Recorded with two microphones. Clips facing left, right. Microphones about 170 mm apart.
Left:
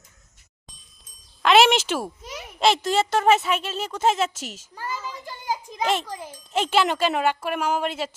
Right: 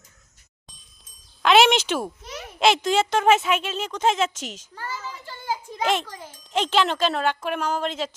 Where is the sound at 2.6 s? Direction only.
Centre (ahead or behind); by 5.7 s 15° left (ahead or behind).